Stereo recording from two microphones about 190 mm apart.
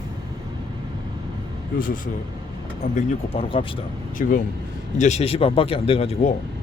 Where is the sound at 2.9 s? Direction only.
30° left (ahead or behind).